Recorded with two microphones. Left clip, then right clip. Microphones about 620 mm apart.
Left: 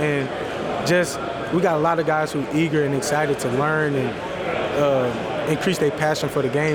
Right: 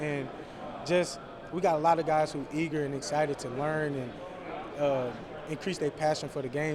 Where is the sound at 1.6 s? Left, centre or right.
Right.